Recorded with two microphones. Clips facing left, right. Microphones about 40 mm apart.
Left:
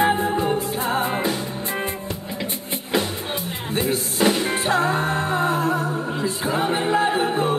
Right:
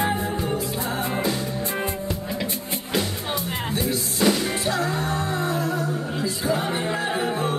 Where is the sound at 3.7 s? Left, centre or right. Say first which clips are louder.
Left 5 dB; left.